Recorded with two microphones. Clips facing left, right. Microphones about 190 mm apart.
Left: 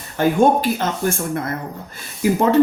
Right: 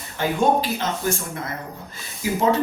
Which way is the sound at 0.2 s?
50° left (ahead or behind).